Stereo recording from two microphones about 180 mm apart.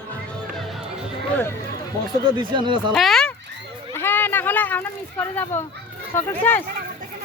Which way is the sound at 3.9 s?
10° left (ahead or behind).